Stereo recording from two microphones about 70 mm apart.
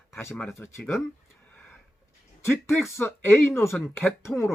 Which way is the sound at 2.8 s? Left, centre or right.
Left.